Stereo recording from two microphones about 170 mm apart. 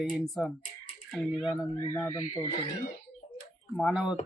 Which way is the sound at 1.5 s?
15° left (ahead or behind).